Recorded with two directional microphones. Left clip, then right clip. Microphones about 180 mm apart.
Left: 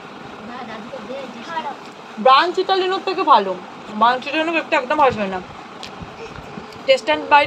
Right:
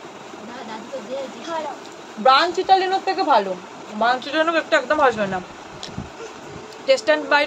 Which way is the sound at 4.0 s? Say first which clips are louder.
Left 3 dB; 5° right (ahead or behind).